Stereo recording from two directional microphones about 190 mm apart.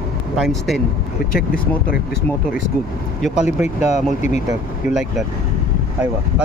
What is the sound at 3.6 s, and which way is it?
Speech, 35° left (ahead or behind).